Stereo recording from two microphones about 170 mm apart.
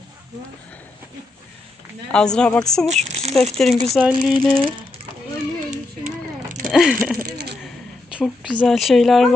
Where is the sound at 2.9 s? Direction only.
40° right (ahead or behind).